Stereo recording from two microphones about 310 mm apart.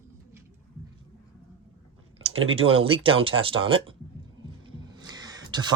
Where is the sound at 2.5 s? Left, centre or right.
Centre.